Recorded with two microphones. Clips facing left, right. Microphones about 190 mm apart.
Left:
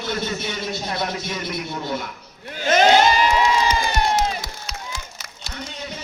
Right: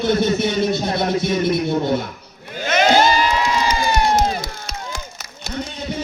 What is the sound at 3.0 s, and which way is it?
Crowd, 35° right (ahead or behind).